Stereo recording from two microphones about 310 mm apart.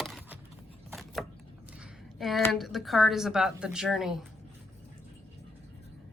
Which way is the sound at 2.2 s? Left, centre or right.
Centre.